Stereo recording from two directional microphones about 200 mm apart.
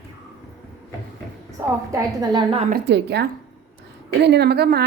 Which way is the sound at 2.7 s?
55° right (ahead or behind).